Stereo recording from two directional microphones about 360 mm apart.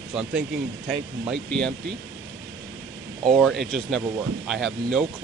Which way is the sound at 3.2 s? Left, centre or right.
Centre.